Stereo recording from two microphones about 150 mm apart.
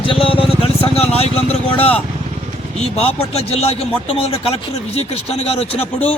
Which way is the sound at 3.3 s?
45° left (ahead or behind).